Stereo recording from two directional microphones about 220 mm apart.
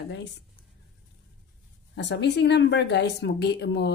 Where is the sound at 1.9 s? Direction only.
50° left (ahead or behind).